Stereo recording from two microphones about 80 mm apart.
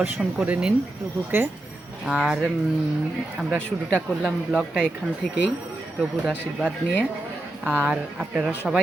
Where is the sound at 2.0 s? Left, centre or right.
Centre.